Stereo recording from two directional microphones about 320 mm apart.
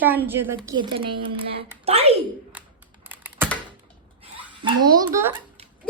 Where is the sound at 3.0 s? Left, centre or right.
Centre.